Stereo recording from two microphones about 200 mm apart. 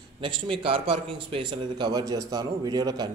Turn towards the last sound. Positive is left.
turn(degrees=-20)  # may be behind; listen again after turning